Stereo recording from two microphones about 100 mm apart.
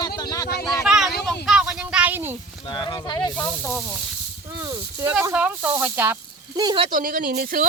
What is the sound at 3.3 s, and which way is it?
Speech, 15° left (ahead or behind).